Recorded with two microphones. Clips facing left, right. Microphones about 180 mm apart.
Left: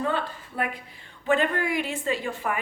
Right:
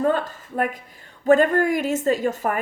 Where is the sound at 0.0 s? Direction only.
45° right (ahead or behind).